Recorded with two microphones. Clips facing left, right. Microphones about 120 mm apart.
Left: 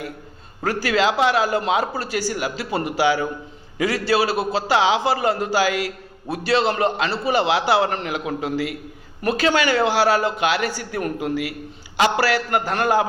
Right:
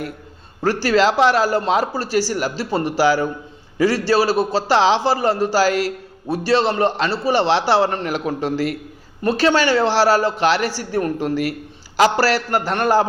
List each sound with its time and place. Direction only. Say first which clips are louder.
0.6 s speech: right 4 dB; 35° right (ahead or behind)